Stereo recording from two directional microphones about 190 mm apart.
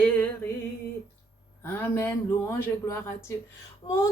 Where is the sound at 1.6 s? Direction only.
10° left (ahead or behind).